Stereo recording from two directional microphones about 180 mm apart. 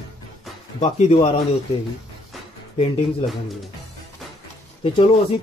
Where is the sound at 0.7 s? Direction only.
40° left (ahead or behind).